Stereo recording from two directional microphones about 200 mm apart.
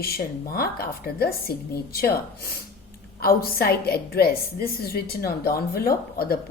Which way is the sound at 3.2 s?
50° left (ahead or behind).